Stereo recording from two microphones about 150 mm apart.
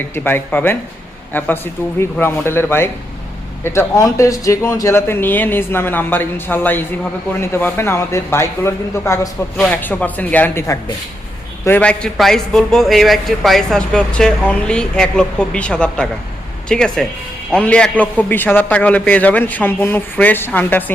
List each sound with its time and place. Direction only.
0.1 s a man's voice: 15° left (ahead or behind)
11.6 s a man's voice: 10° left (ahead or behind)